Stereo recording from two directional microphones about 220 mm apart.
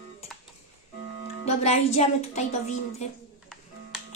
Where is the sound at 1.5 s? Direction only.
30° left (ahead or behind).